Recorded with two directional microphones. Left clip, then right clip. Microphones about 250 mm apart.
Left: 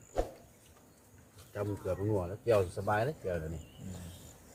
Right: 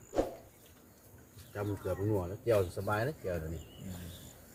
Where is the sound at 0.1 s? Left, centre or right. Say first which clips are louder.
Right 3 dB; centre.